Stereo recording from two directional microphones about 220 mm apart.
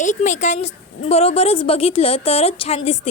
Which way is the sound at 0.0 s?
35° left (ahead or behind).